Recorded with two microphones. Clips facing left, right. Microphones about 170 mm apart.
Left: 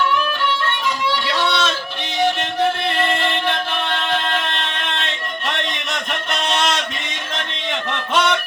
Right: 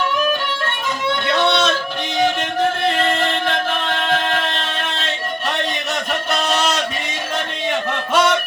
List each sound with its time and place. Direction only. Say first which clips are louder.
0.6 s music: left 1 dB; 50° right (ahead or behind)
3.0 s music: right 1 dB; 45° right (ahead or behind)
7.7 s a sound: right 2 dB; 10° right (ahead or behind)